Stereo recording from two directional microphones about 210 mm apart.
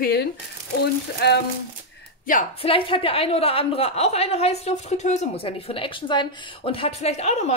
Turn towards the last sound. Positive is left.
turn(degrees=30)  # may be behind; listen again after turning